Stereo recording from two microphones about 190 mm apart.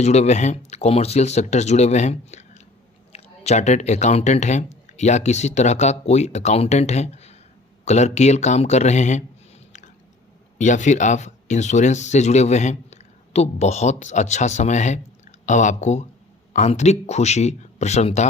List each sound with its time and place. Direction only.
0.0 s speech: 35° left (ahead or behind)
10.6 s speech: 40° left (ahead or behind)